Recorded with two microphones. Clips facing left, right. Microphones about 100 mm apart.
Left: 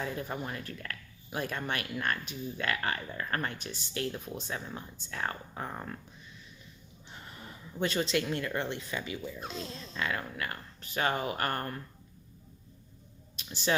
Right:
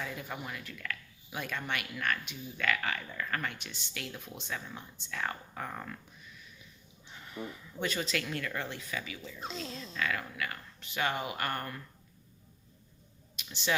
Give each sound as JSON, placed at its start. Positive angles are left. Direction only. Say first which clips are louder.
{"t": 0.0, "sound": "speech", "louder": "left 4 dB", "side_deg": 35}
{"t": 7.1, "sound": "speech", "louder": "right 5 dB", "side_deg": 30}
{"t": 13.3, "sound": "a sound", "louder": "left 2 dB", "side_deg": 35}